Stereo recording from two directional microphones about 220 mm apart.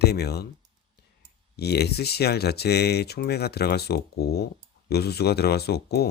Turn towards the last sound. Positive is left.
turn(degrees=45)  # may be behind; listen again after turning